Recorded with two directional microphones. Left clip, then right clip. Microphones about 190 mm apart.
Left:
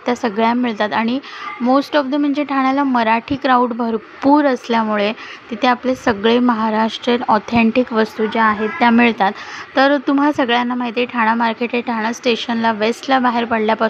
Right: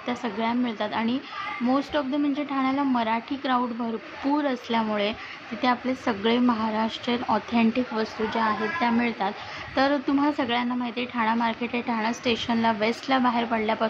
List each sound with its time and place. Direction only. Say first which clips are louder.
0.0 s speech: left 11 dB; 40° left (ahead or behind)
9.8 s speech: left 9 dB; 30° left (ahead or behind)